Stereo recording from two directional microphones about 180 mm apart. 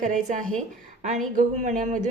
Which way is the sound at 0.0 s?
45° right (ahead or behind).